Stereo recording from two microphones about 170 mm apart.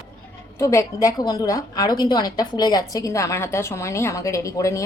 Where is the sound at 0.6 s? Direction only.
20° left (ahead or behind).